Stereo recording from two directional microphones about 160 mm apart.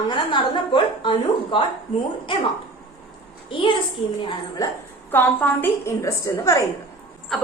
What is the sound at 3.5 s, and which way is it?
A woman's voice, 30° left (ahead or behind).